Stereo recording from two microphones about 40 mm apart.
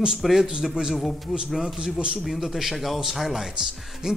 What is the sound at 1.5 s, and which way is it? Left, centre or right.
Speech, centre.